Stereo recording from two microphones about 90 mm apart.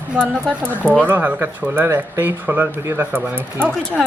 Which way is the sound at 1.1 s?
20° right (ahead or behind).